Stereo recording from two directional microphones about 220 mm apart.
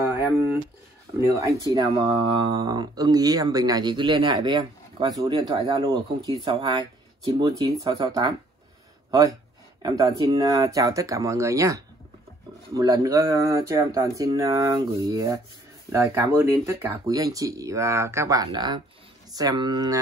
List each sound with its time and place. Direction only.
0.0 s a sound: 10° right (ahead or behind)
1.1 s speech: 15° right (ahead or behind)
9.8 s speech: 15° right (ahead or behind)